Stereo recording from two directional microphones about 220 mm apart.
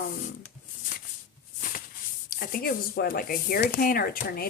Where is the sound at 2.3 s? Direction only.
40° left (ahead or behind).